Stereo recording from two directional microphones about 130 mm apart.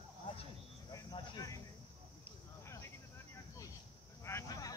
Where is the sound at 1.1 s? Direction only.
30° left (ahead or behind).